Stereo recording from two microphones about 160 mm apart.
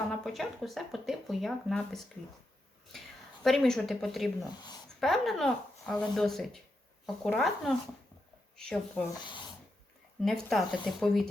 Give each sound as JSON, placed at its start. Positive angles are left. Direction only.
{"t": 0.1, "sound": "speech", "side_deg": 0}
{"t": 3.4, "sound": "speech", "side_deg": 0}
{"t": 4.4, "sound": "speech", "side_deg": 25}
{"t": 4.9, "sound": "speech", "side_deg": 0}
{"t": 9.2, "sound": "speech", "side_deg": 30}
{"t": 10.2, "sound": "speech", "side_deg": 0}